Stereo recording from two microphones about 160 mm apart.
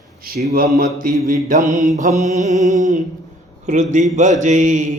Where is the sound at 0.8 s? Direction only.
65° right (ahead or behind).